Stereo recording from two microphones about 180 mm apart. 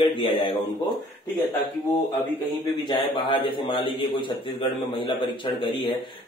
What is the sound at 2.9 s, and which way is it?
Speech, 25° left (ahead or behind).